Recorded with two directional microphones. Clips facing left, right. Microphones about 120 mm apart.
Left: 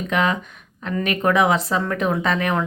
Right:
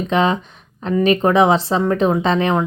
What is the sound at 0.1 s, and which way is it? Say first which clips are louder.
A woman's voice: right 4 dB; 30° right (ahead or behind).